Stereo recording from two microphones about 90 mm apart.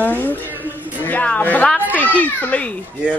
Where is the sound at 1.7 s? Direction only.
20° right (ahead or behind).